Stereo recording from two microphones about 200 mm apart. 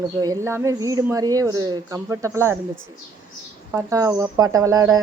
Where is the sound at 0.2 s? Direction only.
15° right (ahead or behind).